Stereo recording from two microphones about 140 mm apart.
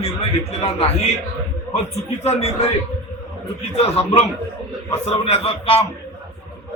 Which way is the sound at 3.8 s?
45° left (ahead or behind).